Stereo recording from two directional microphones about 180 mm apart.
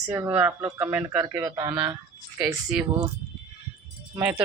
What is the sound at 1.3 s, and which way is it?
Speech, 20° right (ahead or behind).